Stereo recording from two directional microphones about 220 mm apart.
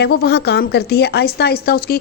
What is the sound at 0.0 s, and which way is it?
Speech, 45° left (ahead or behind).